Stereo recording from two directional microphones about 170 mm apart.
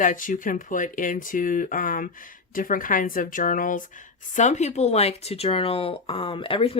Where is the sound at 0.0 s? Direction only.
50° left (ahead or behind).